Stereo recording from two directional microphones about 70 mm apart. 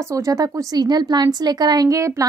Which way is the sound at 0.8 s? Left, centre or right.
Right.